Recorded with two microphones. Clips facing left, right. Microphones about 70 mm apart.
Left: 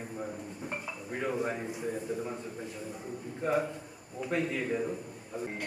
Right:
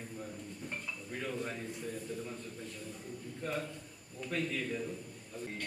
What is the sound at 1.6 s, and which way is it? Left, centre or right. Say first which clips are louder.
A man's voice: left 6 dB; centre.